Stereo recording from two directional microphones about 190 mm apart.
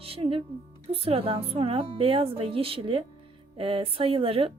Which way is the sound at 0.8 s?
30° right (ahead or behind).